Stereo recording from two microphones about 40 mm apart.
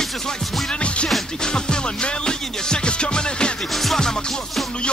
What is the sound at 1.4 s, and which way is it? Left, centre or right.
Music, left.